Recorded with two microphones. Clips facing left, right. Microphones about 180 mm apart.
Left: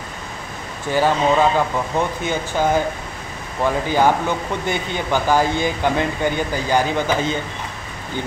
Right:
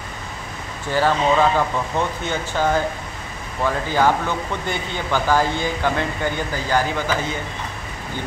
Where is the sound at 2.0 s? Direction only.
15° left (ahead or behind).